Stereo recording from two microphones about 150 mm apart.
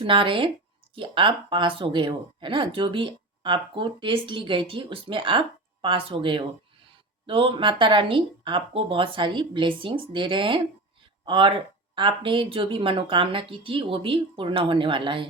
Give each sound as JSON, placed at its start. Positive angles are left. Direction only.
{"t": 0.0, "sound": "speech", "side_deg": -35}